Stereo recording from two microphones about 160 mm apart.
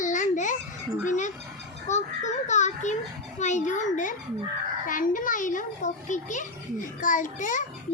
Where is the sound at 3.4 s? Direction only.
50° left (ahead or behind).